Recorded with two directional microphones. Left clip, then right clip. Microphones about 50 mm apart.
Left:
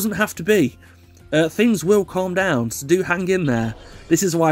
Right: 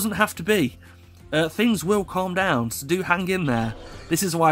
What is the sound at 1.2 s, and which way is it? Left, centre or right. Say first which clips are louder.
A man's voice: left 4 dB; left.